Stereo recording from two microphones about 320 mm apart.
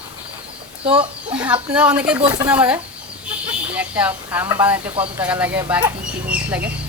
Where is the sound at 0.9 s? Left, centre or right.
Centre.